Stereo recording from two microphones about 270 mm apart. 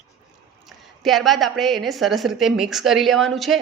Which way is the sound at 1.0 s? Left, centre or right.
Centre.